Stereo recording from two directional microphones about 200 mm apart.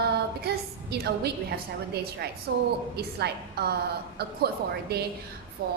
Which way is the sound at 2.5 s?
60° right (ahead or behind).